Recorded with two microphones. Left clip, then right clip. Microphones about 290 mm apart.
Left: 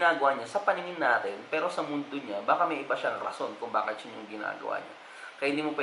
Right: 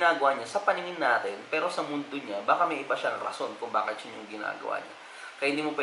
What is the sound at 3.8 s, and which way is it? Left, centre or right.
A man's voice, centre.